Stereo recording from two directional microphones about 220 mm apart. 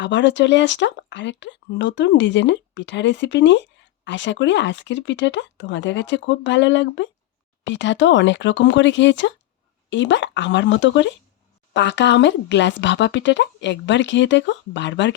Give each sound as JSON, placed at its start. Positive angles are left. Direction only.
{"t": 0.0, "sound": "speech", "side_deg": 55}